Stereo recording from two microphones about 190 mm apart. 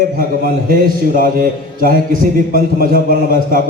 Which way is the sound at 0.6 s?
50° right (ahead or behind).